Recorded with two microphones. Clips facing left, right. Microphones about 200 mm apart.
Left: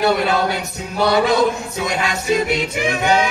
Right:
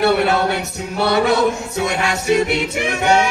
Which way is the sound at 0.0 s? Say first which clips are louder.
Right 2 dB; 65° right (ahead or behind).